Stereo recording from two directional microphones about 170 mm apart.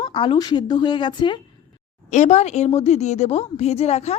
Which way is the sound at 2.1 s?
45° left (ahead or behind).